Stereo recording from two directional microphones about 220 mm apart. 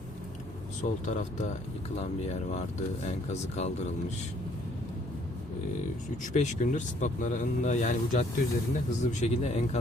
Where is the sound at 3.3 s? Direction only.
30° left (ahead or behind).